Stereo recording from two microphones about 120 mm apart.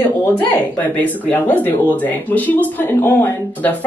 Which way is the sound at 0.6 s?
15° left (ahead or behind).